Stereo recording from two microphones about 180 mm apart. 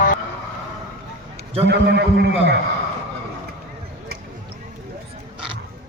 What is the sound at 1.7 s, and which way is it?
Speech, 70° right (ahead or behind).